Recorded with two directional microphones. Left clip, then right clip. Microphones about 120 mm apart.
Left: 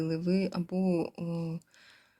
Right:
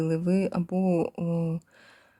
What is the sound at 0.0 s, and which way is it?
Speech, 35° right (ahead or behind).